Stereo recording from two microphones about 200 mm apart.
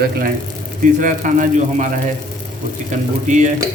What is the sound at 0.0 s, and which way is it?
A man's voice, 45° right (ahead or behind).